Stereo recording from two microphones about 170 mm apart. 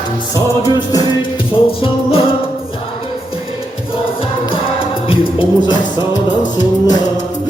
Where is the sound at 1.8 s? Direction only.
35° left (ahead or behind).